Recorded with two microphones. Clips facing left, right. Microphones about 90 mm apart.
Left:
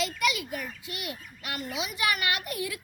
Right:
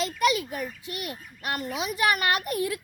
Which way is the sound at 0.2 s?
40° right (ahead or behind).